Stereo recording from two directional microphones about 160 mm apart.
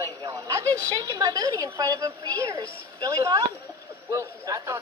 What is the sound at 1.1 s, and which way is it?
A woman's voice, 25° right (ahead or behind).